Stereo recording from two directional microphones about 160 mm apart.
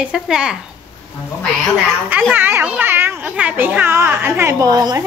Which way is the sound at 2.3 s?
10° right (ahead or behind).